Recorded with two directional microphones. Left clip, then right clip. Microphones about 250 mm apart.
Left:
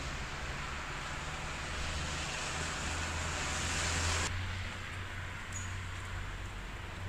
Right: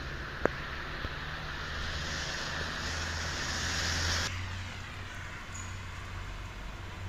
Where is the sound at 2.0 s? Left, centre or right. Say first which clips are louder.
Right 2 dB; right.